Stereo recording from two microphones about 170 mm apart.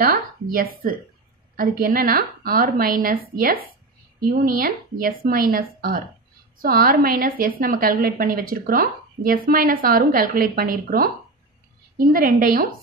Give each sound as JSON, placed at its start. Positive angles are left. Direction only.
{"t": 0.0, "sound": "a woman's voice", "side_deg": -60}